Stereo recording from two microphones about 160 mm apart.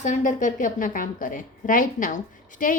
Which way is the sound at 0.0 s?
50° left (ahead or behind).